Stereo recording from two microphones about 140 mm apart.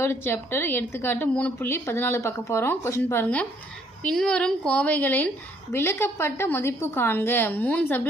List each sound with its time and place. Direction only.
0.0 s speech: 15° left (ahead or behind)